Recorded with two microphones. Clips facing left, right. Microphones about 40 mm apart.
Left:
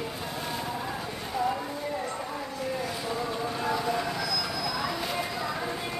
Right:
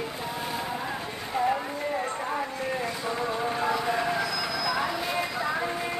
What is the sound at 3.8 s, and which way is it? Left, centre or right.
Vehicle, right.